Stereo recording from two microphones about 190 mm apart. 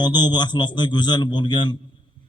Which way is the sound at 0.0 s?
25° left (ahead or behind).